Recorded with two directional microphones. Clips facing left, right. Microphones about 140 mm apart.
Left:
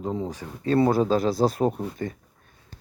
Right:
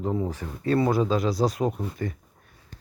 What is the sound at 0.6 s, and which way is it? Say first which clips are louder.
Speech: left 2 dB; 30° left (ahead or behind).